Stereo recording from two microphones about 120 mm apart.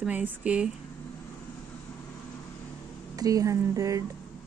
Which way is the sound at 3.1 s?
30° right (ahead or behind).